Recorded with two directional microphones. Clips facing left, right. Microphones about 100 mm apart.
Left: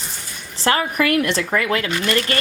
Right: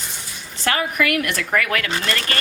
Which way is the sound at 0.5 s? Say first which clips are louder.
Left 3 dB; 30° left (ahead or behind).